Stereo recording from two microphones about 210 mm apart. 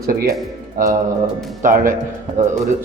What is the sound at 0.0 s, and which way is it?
A man's voice, 45° right (ahead or behind).